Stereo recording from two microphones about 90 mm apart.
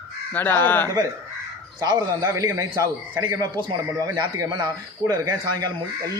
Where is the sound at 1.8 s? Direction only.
50° right (ahead or behind).